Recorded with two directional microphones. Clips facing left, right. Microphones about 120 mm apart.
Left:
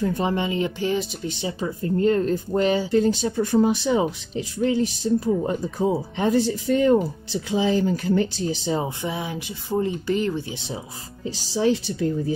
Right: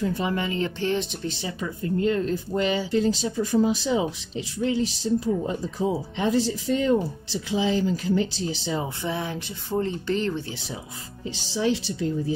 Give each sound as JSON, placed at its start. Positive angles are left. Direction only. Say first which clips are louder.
{"t": 0.2, "sound": "speech", "louder": "left 3 dB", "side_deg": 25}
{"t": 1.8, "sound": "speech", "louder": "left 3 dB", "side_deg": 40}
{"t": 8.8, "sound": "speech", "louder": "left 1 dB", "side_deg": 15}
{"t": 11.3, "sound": "speech", "louder": "left 3 dB", "side_deg": 40}